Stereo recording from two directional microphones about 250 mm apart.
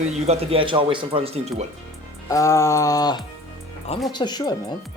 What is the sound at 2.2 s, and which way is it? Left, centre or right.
Speech, centre.